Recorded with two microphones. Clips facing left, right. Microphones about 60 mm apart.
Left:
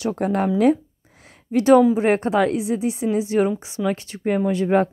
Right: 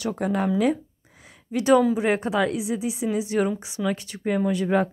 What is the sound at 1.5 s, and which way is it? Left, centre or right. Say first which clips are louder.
A woman's voice: left 5 dB; left.